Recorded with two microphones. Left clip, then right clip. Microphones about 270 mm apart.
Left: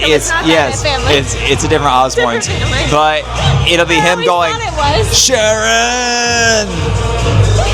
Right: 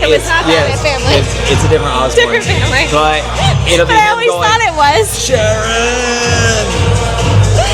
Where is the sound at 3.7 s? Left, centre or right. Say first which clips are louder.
Right 2 dB; left.